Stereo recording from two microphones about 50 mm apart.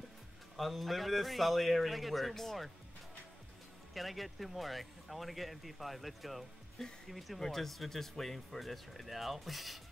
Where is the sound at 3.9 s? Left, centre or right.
Centre.